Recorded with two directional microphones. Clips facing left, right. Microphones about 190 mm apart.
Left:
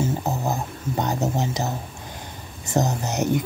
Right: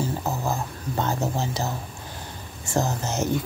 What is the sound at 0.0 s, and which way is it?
Music, 20° left (ahead or behind).